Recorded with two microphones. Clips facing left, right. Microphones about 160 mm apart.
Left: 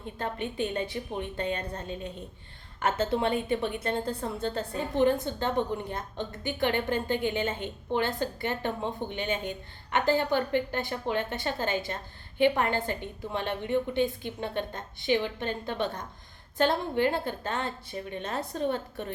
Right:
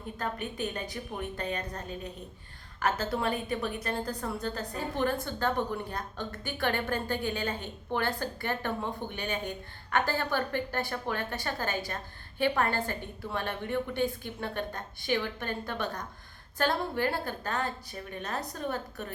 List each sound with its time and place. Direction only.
0.2 s a woman's voice: 25° left (ahead or behind)